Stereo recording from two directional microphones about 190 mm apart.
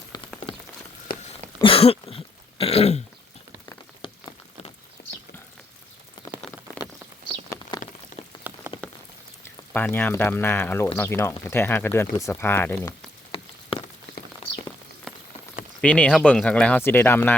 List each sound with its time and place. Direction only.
0.1 s rain on surface: 20° left (ahead or behind)
1.6 s throat clearing: 30° left (ahead or behind)
4.0 s a sound: 25° left (ahead or behind)
5.0 s a sound: 55° left (ahead or behind)
6.5 s rain on surface: 30° left (ahead or behind)
8.5 s rain on surface: 10° right (ahead or behind)
8.8 s rain on surface: 5° left (ahead or behind)
9.7 s speech: 10° left (ahead or behind)
13.3 s a sound: 30° left (ahead or behind)
15.1 s clip-clop: 5° left (ahead or behind)
15.8 s speech: 5° left (ahead or behind)